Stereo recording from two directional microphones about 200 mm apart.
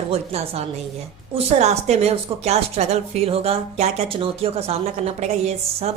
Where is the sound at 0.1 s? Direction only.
30° right (ahead or behind).